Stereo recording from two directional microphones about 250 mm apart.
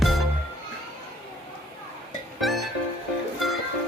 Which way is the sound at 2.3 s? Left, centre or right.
Centre.